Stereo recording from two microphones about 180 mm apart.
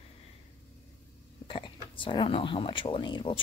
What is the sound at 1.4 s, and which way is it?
Speech, 30° left (ahead or behind).